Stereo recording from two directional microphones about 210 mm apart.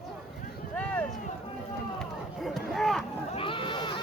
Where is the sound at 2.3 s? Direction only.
Centre (ahead or behind).